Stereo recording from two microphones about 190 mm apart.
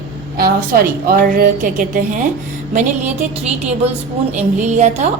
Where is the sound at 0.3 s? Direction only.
55° right (ahead or behind).